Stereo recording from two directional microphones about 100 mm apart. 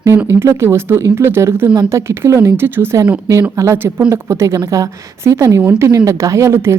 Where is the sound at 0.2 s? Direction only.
25° right (ahead or behind).